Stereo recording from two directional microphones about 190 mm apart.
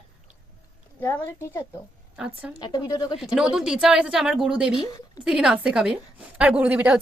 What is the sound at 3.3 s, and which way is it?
Speech, 5° right (ahead or behind).